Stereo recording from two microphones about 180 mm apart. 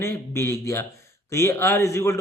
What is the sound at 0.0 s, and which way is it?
A man's voice, 15° left (ahead or behind).